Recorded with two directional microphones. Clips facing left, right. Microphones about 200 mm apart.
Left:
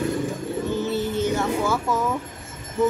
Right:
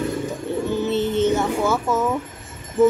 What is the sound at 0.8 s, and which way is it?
Music, 25° right (ahead or behind).